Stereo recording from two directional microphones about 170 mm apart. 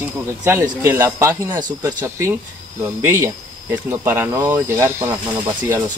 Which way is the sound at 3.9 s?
15° right (ahead or behind).